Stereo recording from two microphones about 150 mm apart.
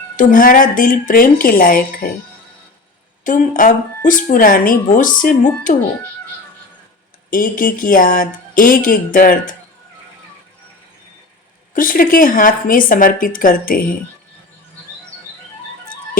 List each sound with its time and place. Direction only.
0.2 s speech: 65° left (ahead or behind)
3.2 s speech: 60° left (ahead or behind)
7.3 s speech: 65° left (ahead or behind)
11.7 s speech: 65° left (ahead or behind)